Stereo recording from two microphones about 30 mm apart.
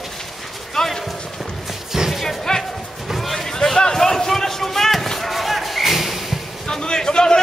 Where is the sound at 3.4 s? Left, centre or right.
Left.